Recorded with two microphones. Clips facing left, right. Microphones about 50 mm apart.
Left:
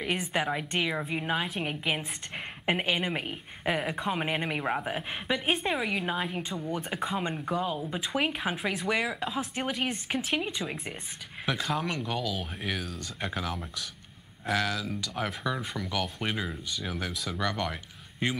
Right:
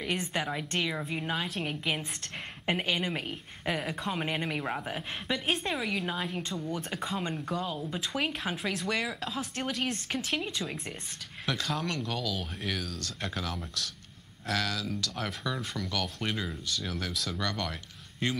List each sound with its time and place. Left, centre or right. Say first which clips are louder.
0.0 s a woman's voice: left 2 dB; centre